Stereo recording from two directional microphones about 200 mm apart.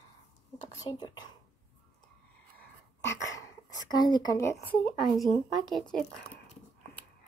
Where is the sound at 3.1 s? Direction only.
15° left (ahead or behind).